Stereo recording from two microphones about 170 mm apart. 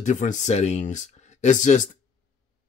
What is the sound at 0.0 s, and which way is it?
Speech, 45° left (ahead or behind).